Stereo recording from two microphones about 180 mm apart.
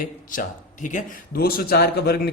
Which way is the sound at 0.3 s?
45° left (ahead or behind).